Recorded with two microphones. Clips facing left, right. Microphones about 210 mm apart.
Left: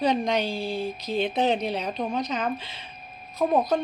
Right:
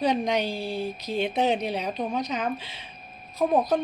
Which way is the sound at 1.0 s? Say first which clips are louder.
Left 1 dB; 15° right (ahead or behind).